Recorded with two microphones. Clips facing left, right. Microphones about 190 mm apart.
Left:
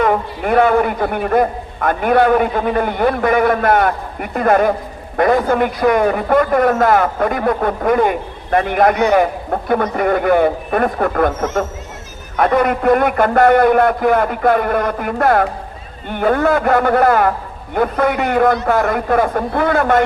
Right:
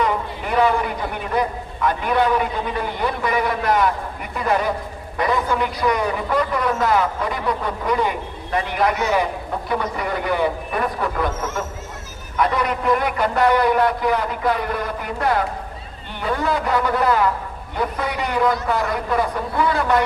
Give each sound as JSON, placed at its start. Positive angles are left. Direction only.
{"t": 0.0, "sound": "a man's voice", "side_deg": 50}